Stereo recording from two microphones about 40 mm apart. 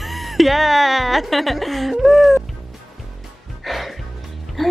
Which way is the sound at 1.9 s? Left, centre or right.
Centre.